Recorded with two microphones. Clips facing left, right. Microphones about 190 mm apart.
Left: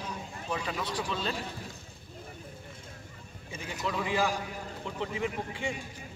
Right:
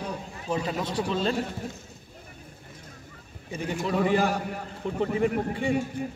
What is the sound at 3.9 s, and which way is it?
Speech, 50° right (ahead or behind).